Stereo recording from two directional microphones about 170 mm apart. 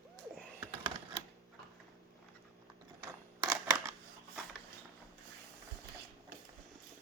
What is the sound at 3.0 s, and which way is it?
Scissors, 20° right (ahead or behind).